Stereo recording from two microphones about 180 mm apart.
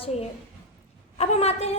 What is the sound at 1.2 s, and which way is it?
Speech, 35° left (ahead or behind).